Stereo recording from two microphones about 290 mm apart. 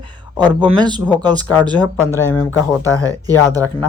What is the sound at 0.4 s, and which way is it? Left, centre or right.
Speech, centre.